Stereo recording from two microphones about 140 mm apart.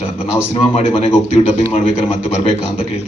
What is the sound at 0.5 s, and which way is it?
Speech, 40° left (ahead or behind).